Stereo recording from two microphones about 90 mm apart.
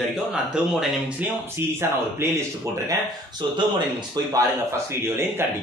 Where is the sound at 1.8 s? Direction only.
25° right (ahead or behind).